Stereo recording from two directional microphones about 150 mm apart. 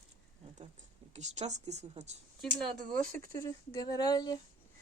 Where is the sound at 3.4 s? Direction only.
25° left (ahead or behind).